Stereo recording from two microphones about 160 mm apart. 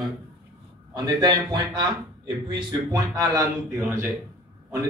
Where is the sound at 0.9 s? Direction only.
25° right (ahead or behind).